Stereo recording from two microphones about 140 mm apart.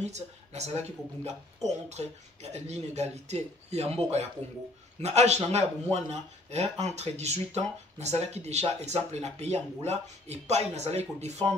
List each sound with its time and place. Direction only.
0.0 s speech: 50° right (ahead or behind)
2.5 s speech: 50° right (ahead or behind)